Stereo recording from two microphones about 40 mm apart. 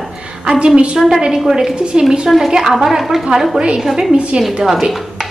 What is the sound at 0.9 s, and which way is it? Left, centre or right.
A woman's voice, centre.